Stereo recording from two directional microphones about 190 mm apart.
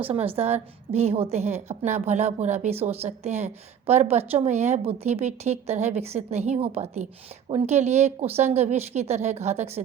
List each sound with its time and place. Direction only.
0.1 s a woman's voice: 30° right (ahead or behind)